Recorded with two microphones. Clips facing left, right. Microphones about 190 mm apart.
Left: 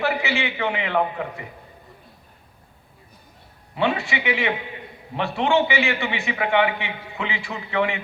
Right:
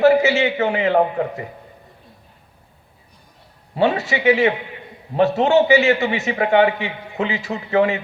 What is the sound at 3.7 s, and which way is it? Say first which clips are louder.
A man's voice: right 5 dB; 40° right (ahead or behind).